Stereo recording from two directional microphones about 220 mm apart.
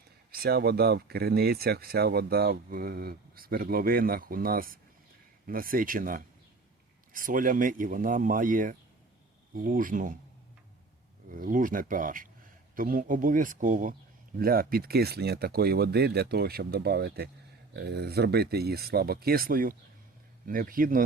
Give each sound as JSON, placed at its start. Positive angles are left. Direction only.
{"t": 0.3, "sound": "speech", "side_deg": -45}
{"t": 11.3, "sound": "speech", "side_deg": -40}